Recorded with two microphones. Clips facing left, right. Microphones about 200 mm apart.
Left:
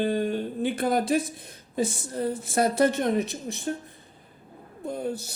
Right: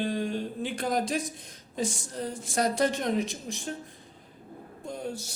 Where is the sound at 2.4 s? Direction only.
5° left (ahead or behind).